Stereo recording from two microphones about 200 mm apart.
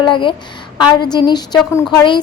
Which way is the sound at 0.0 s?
25° left (ahead or behind).